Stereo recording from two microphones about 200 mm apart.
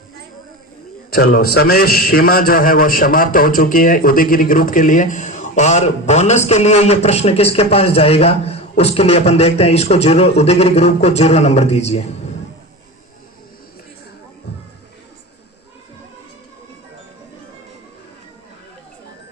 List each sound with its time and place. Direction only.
1.1 s a man's voice: 50° left (ahead or behind); by 12.0 s 30° left (ahead or behind)